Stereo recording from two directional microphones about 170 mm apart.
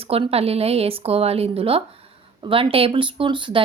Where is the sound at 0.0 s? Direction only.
35° right (ahead or behind).